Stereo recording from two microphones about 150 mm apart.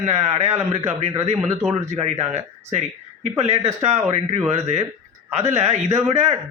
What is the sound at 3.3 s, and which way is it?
A man's voice, 45° right (ahead or behind).